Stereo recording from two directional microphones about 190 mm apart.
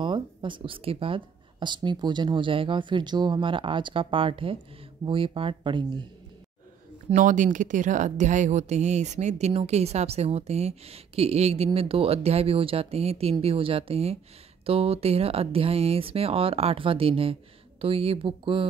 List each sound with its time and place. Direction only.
0.0 s speech: 25° right (ahead or behind)
7.1 s speech: 40° right (ahead or behind)